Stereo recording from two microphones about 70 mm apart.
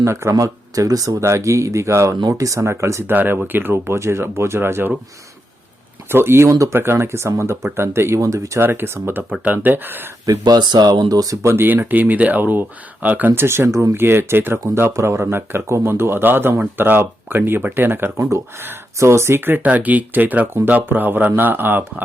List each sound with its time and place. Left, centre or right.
0.0 s speech: right
1.2 s speech: right
3.1 s speech: right
6.1 s speech: right
6.5 s speech: right
6.7 s speech: right
8.6 s speech: right
10.2 s speech: right
11.4 s speech: right